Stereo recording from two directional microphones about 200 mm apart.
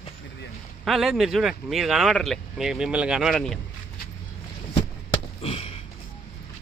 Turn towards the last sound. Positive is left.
turn(degrees=30)  # may be behind; listen again after turning